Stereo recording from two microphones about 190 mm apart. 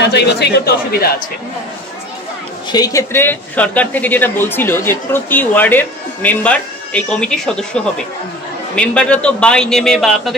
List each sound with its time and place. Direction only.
0.0 s speech: 60° left (ahead or behind)
2.7 s a man's voice: 20° left (ahead or behind); by 10.3 s centre (ahead or behind)